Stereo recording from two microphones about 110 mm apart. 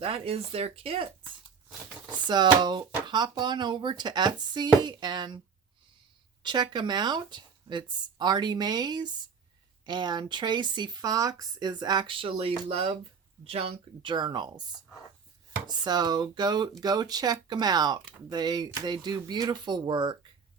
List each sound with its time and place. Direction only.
0.0 s speech: 60° right (ahead or behind)
2.2 s speech: 45° right (ahead or behind)
6.4 s speech: 40° right (ahead or behind)
15.6 s speech: 40° right (ahead or behind)